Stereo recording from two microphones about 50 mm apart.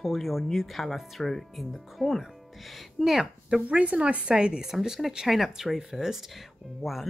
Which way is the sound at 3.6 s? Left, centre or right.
Right.